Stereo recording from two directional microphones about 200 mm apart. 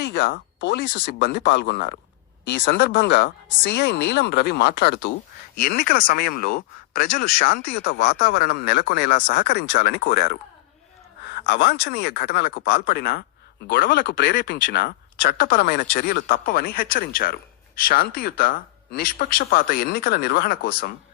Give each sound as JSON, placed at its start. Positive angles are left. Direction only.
{"t": 0.0, "sound": "speech", "side_deg": 65}
{"t": 2.4, "sound": "speech", "side_deg": 65}
{"t": 5.5, "sound": "speech", "side_deg": 50}
{"t": 8.3, "sound": "speech", "side_deg": 55}
{"t": 11.4, "sound": "speech", "side_deg": 55}